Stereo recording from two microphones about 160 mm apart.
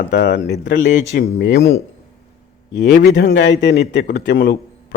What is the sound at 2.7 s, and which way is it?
A man's voice, 90° left.